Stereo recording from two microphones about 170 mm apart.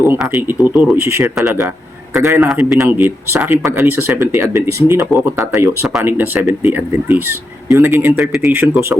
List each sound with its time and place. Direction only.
0.0 s speech: 15° right (ahead or behind)
2.5 s speech: 5° right (ahead or behind)
2.8 s speech: 15° right (ahead or behind)
8.2 s speech: centre (ahead or behind)
8.6 s speech: 15° right (ahead or behind)